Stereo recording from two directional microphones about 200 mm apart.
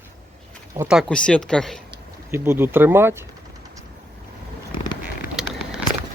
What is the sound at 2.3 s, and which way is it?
Speech, 10° right (ahead or behind).